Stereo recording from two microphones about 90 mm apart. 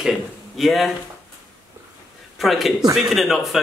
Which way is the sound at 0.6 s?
Centre (ahead or behind).